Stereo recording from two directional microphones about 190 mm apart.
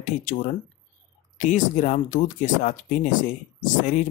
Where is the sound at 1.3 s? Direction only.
40° left (ahead or behind).